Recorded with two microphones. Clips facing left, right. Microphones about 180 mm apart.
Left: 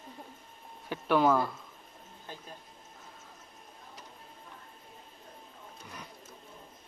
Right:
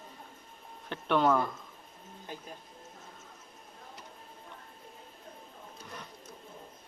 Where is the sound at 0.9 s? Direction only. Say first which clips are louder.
Left 1 dB; 5° left (ahead or behind).